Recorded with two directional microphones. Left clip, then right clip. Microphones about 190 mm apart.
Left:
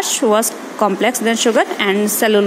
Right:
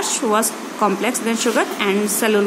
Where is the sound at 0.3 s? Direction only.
25° left (ahead or behind).